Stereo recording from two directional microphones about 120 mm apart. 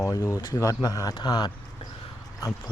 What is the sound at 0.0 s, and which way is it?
Speech, 25° left (ahead or behind).